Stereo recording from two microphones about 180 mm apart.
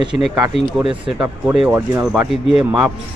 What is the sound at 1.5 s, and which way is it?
Speech, 5° right (ahead or behind).